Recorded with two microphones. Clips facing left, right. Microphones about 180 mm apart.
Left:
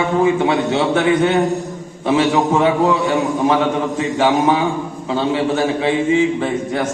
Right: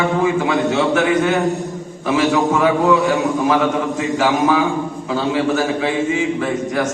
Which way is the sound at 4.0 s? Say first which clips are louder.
Left 2 dB; 25° left (ahead or behind).